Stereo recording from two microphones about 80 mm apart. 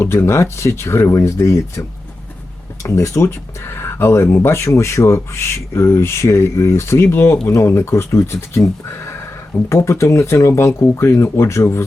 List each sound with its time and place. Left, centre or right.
0.0 s speech: left
2.8 s speech: left
9.6 s speech: left